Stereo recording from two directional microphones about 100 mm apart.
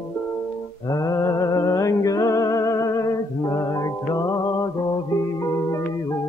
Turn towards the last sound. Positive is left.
turn(degrees=35)  # may be behind; listen again after turning